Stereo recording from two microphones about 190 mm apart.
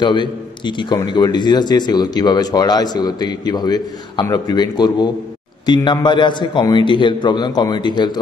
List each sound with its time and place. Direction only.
0.0 s a man's voice: 25° left (ahead or behind)